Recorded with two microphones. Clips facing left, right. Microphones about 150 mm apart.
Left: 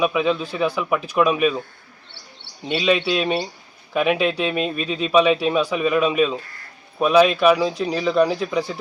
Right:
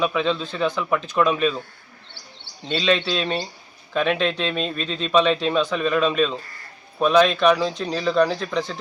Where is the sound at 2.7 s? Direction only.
10° left (ahead or behind).